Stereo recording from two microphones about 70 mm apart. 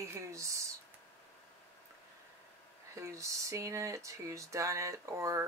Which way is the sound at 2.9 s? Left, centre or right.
Right.